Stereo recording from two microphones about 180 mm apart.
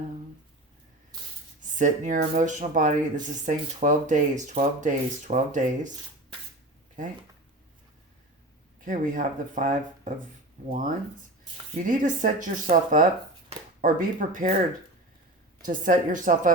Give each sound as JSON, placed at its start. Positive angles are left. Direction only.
{"t": 1.7, "sound": "speech", "side_deg": -45}
{"t": 8.8, "sound": "speech", "side_deg": -45}
{"t": 15.6, "sound": "speech", "side_deg": -50}